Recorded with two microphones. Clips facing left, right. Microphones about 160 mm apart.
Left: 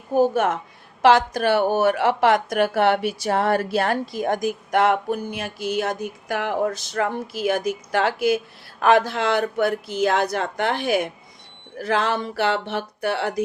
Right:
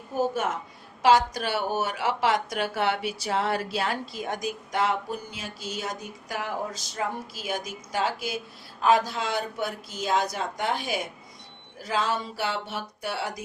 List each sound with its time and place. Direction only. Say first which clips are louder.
0.1 s speech: left 8 dB; 60° left (ahead or behind)